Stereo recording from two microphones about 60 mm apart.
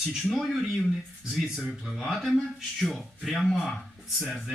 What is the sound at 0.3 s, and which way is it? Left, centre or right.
Speech, centre.